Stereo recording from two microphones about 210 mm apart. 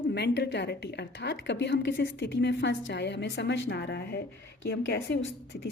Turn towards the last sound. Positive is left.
turn(degrees=60)  # may be behind; listen again after turning